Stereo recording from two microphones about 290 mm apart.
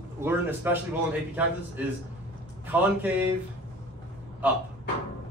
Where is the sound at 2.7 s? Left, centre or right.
Centre.